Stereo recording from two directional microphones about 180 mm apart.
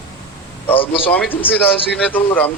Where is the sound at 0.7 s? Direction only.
30° left (ahead or behind).